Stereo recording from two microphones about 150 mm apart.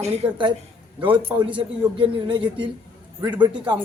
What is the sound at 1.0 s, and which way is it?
A man's voice, 35° right (ahead or behind).